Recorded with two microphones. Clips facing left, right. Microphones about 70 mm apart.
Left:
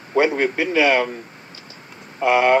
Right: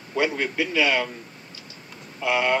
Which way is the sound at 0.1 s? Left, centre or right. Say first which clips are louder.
Left 7 dB; left.